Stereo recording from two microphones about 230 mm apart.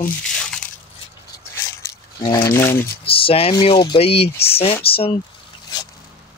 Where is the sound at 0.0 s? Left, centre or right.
Centre.